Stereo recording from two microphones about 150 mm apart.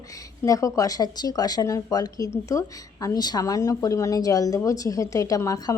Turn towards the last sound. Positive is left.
turn(degrees=20)  # may be behind; listen again after turning